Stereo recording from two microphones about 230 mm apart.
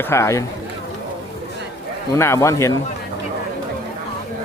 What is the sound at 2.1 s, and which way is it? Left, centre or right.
Speech, centre.